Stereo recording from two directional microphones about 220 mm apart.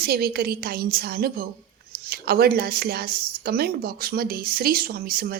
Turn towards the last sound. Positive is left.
turn(degrees=-45)  # may be behind; listen again after turning